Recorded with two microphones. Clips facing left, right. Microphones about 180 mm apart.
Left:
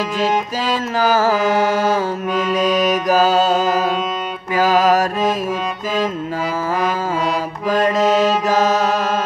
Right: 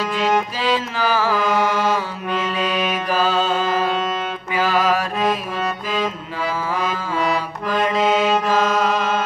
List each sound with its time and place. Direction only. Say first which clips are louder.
0.2 s music: even; 45° left (ahead or behind)
7.6 s music: left 4 dB; 45° left (ahead or behind)